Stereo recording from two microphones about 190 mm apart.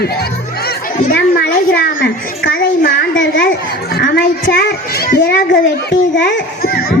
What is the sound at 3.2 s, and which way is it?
Speech, 70° left (ahead or behind).